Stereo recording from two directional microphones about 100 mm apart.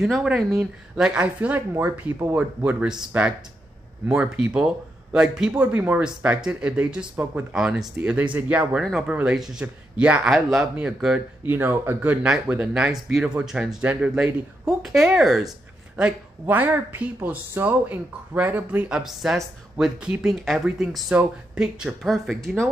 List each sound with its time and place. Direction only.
0.0 s speech: 5° right (ahead or behind)
4.5 s speech: 10° right (ahead or behind)
11.4 s speech: 20° right (ahead or behind); by 15.5 s 5° right (ahead or behind)
16.0 s speech: 20° right (ahead or behind)
18.9 s speech: 5° right (ahead or behind)